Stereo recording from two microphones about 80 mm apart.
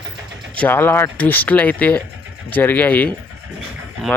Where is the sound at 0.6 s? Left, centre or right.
Left.